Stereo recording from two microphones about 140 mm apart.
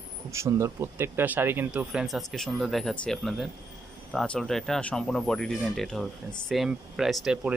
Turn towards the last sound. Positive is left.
turn(degrees=-5)  # may be behind; listen again after turning